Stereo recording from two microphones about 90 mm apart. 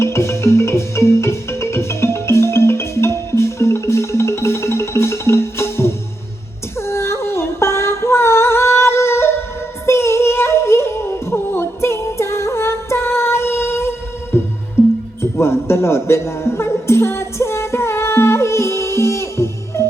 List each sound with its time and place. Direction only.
0.0 s music: 30° left (ahead or behind)
6.7 s female singing: 30° left (ahead or behind)
9.8 s music: 30° left (ahead or behind)